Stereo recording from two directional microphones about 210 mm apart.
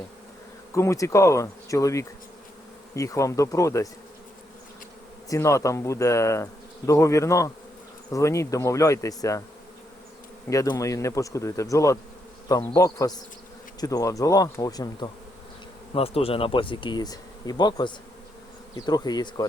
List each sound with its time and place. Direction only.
0.7 s speech: 15° left (ahead or behind)
5.3 s speech: 15° left (ahead or behind)
10.5 s speech: 15° left (ahead or behind)